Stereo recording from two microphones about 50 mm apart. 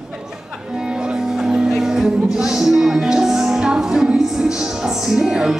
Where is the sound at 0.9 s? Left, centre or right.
Centre.